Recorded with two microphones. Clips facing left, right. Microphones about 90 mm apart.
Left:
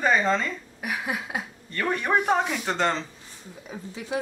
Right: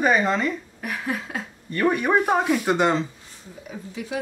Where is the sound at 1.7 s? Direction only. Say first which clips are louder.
Right 4 dB; 10° right (ahead or behind).